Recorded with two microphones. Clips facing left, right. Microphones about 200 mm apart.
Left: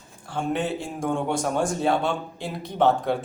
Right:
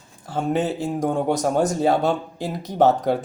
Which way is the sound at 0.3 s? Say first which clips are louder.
Right 4 dB; 40° right (ahead or behind).